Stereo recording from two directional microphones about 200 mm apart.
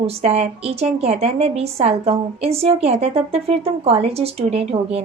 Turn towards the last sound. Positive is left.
turn(degrees=-30)  # may be behind; listen again after turning